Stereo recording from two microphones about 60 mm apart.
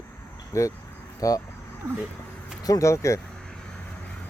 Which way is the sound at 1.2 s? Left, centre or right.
Left.